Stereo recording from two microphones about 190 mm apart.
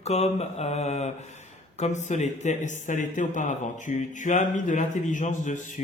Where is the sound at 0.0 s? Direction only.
35° left (ahead or behind).